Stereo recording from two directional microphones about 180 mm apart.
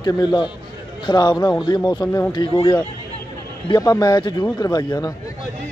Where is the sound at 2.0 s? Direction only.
10° left (ahead or behind).